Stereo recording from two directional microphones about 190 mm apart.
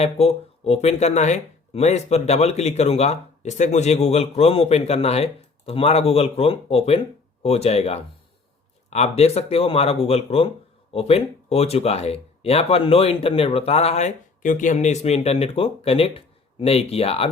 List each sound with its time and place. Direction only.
0.0 s speech: 30° left (ahead or behind)